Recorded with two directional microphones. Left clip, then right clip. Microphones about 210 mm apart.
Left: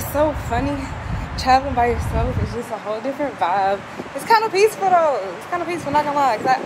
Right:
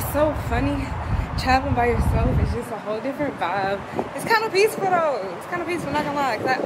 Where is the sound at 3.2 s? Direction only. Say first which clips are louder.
Left 6 dB; centre (ahead or behind).